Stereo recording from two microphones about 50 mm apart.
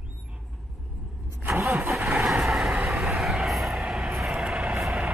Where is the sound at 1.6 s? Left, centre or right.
Right.